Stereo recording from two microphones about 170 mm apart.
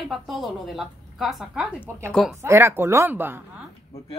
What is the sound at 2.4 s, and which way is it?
Speech, 15° right (ahead or behind).